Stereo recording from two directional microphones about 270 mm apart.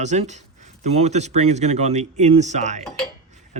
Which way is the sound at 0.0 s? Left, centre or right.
Right.